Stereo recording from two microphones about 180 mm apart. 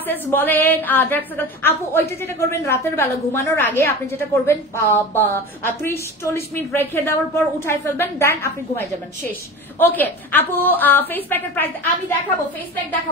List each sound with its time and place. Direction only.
0.0 s a woman's voice: 10° left (ahead or behind)